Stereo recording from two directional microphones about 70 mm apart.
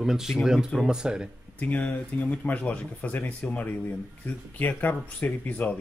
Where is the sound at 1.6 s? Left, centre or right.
Left.